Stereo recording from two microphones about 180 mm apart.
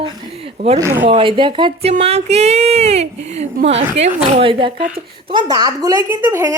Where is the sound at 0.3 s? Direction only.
35° right (ahead or behind).